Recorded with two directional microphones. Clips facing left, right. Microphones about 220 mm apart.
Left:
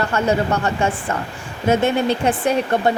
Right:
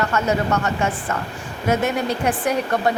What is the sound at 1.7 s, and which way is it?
Speech, 25° left (ahead or behind).